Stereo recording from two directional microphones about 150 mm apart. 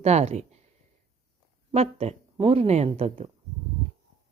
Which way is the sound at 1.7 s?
45° right (ahead or behind).